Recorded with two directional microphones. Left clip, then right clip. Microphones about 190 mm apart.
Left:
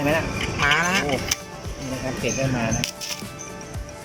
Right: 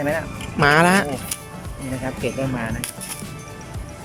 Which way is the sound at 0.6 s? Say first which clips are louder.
Right 5 dB; 55° right (ahead or behind).